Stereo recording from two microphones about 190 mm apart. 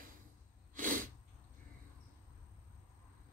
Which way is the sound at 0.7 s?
45° right (ahead or behind).